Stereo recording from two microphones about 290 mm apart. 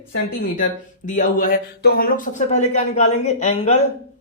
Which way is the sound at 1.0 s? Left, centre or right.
Left.